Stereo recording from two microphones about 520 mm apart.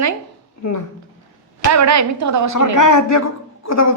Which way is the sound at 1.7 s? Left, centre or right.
Right.